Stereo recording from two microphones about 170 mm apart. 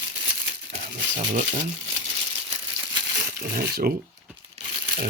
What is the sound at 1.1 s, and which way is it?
Speech, 50° right (ahead or behind).